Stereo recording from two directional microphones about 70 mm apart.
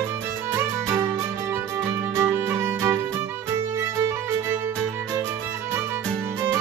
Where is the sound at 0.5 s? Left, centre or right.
Right.